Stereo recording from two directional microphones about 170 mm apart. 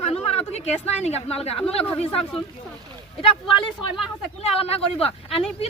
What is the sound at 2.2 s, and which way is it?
Speech, centre (ahead or behind).